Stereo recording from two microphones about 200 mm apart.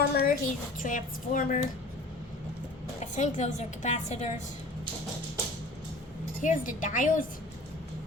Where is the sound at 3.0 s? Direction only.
35° left (ahead or behind).